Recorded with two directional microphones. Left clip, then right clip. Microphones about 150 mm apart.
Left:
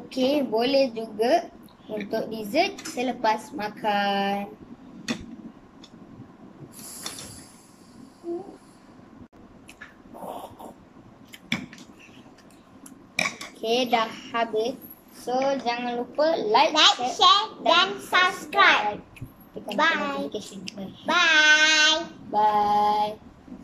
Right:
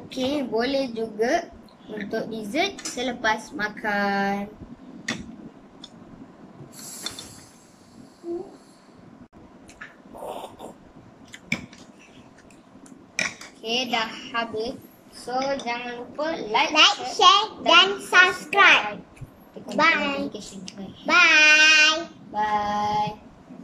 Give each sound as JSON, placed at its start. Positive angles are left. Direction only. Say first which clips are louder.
{"t": 0.1, "sound": "a woman's voice", "louder": "left 2 dB", "side_deg": 15}
{"t": 13.1, "sound": "dishes", "louder": "left 1 dB", "side_deg": 25}
{"t": 15.2, "sound": "a woman's voice", "louder": "left 2 dB", "side_deg": 20}
{"t": 17.2, "sound": "a child's voice", "louder": "right 3 dB", "side_deg": -10}
{"t": 19.8, "sound": "a child's voice", "louder": "right 3 dB", "side_deg": -10}
{"t": 22.3, "sound": "a woman's voice", "louder": "left 4 dB", "side_deg": 30}